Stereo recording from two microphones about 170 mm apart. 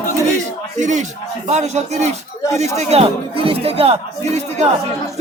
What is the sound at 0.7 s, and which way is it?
Speech, 45° right (ahead or behind).